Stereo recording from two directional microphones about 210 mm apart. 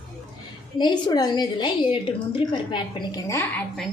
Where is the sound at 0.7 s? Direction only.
20° left (ahead or behind).